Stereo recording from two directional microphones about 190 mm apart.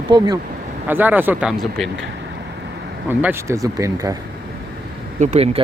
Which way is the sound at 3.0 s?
10° right (ahead or behind).